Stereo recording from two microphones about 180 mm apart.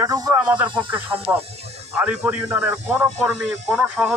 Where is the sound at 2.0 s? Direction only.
10° right (ahead or behind).